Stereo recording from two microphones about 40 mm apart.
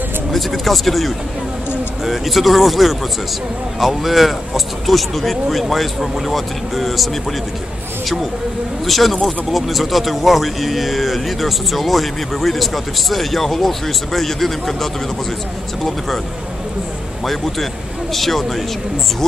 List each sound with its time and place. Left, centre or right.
0.3 s speech: centre
8.8 s speech: centre
18.1 s speech: centre